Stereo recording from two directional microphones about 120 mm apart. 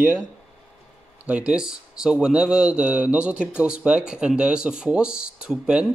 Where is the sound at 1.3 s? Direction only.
10° right (ahead or behind).